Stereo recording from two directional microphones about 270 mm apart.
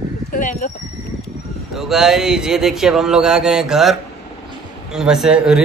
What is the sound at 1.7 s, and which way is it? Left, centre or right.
A man's voice, centre.